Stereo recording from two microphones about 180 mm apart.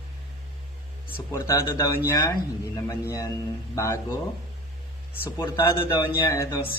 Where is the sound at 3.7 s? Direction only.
15° left (ahead or behind).